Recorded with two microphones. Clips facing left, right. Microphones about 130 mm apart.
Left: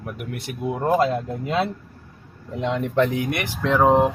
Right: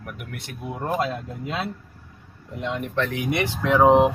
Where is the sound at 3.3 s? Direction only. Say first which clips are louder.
Right 1 dB; 20° right (ahead or behind).